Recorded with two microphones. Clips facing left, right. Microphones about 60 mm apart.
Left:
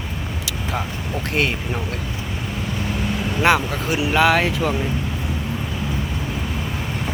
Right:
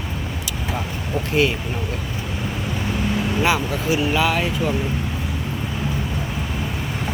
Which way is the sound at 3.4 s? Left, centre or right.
Left.